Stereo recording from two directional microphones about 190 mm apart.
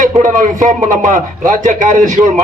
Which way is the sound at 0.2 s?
40° right (ahead or behind).